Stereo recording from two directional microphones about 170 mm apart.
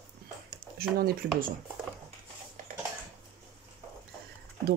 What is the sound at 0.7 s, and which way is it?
Speech, 65° right (ahead or behind).